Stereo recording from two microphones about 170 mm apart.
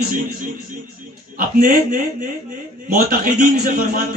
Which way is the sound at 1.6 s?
55° right (ahead or behind).